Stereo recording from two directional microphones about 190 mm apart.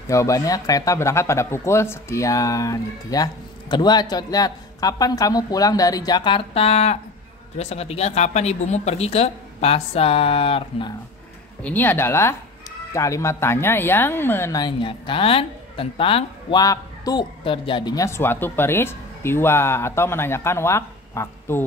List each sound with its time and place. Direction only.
0.1 s speech: 15° left (ahead or behind)
11.6 s speech: 10° left (ahead or behind)